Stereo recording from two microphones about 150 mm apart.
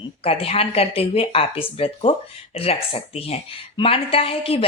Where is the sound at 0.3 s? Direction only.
40° left (ahead or behind).